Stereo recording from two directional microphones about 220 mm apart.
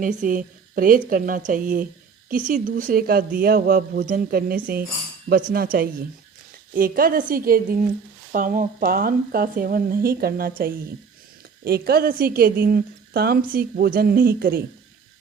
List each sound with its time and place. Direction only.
0.0 s a woman's voice: 35° right (ahead or behind)